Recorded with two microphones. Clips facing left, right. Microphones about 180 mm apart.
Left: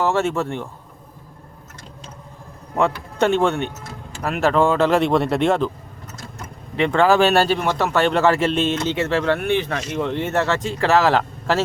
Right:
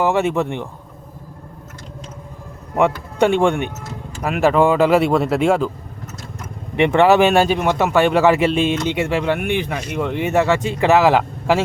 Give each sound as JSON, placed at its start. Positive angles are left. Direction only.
{"t": 0.0, "sound": "speech", "side_deg": -15}
{"t": 2.7, "sound": "speech", "side_deg": -15}
{"t": 6.7, "sound": "speech", "side_deg": -20}